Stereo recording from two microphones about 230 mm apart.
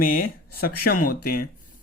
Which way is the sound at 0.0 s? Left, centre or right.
Left.